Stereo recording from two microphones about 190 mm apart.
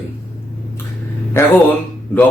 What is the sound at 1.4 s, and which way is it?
Speech, 15° left (ahead or behind).